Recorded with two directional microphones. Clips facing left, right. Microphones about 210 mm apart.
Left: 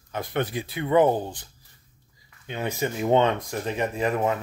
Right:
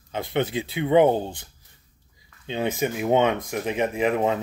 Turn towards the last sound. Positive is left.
turn(degrees=-20)  # may be behind; listen again after turning